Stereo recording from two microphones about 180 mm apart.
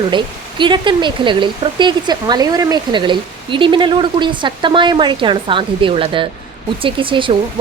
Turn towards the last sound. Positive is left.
turn(degrees=-30)  # may be behind; listen again after turning